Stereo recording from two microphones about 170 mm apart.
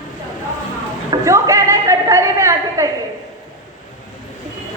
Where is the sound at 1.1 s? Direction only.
20° right (ahead or behind).